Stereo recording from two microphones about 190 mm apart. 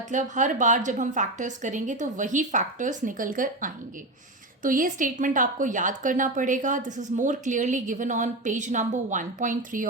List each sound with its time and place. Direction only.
0.1 s a woman's voice: 40° right (ahead or behind)